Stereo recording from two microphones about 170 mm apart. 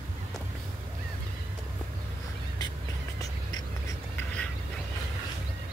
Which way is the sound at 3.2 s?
20° left (ahead or behind).